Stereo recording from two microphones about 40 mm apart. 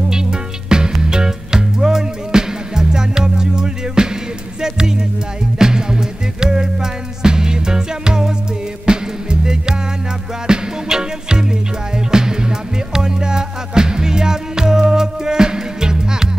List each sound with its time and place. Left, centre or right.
0.1 s music: centre